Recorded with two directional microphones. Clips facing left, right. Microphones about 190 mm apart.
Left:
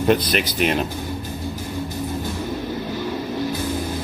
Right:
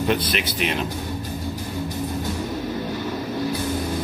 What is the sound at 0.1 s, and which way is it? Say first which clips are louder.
Speech: left 4 dB; 45° left (ahead or behind).